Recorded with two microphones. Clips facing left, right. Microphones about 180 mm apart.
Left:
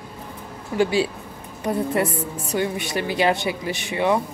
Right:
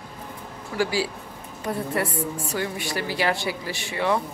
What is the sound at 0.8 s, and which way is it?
A woman's voice, 20° left (ahead or behind).